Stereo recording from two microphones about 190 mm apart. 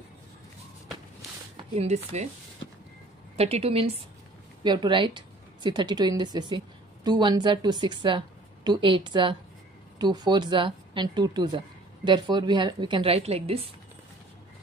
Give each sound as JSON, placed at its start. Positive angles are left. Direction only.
{"t": 1.8, "sound": "a woman's voice", "side_deg": -35}
{"t": 3.3, "sound": "a woman's voice", "side_deg": -30}